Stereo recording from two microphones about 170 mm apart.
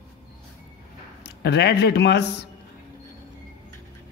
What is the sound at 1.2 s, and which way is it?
Speech, 80° left.